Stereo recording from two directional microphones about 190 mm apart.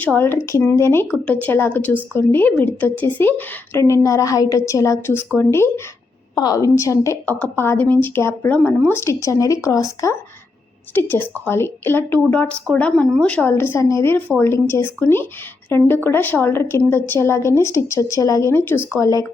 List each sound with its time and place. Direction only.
0.0 s a woman's voice: 10° left (ahead or behind)